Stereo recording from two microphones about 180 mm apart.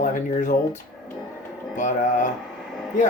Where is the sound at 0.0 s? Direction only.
45° left (ahead or behind).